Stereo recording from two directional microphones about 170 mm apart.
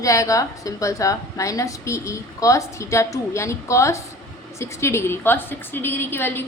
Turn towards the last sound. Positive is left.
turn(degrees=15)  # may be behind; listen again after turning